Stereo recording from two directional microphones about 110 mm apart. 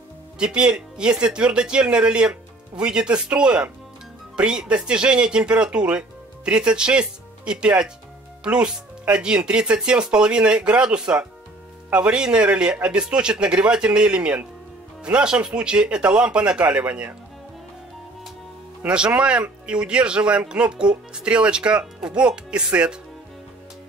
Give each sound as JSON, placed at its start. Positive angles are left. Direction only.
{"t": 0.4, "sound": "speech", "side_deg": -10}
{"t": 18.8, "sound": "speech", "side_deg": -10}